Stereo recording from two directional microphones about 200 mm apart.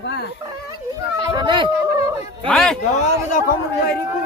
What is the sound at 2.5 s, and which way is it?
Speech, 5° left (ahead or behind).